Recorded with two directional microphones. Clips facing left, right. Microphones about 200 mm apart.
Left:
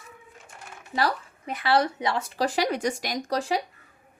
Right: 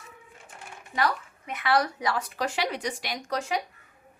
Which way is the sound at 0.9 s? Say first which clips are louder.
Left 1 dB; 30° left (ahead or behind).